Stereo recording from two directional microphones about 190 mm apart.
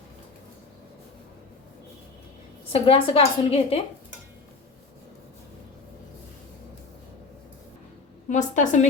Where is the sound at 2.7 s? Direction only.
30° left (ahead or behind).